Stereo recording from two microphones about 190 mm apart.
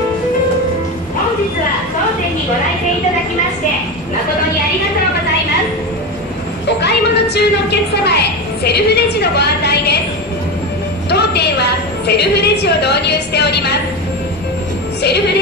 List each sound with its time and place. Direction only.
6.8 s a sound: 60° left (ahead or behind)
11.1 s music: 60° left (ahead or behind)
12.1 s a woman's voice: 60° left (ahead or behind)
15.0 s music: 60° left (ahead or behind)